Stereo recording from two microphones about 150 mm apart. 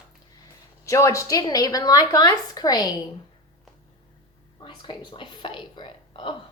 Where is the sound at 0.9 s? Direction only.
20° left (ahead or behind).